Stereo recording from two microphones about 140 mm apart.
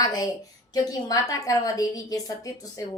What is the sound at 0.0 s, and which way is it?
A woman's voice, 30° left (ahead or behind).